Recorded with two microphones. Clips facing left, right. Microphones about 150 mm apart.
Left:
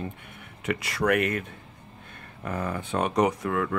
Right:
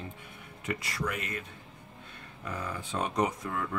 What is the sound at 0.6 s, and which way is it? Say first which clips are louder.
Speech: left 8 dB; 75° left (ahead or behind).